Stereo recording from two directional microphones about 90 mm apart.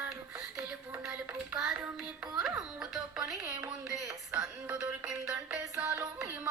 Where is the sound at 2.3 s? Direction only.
5° right (ahead or behind).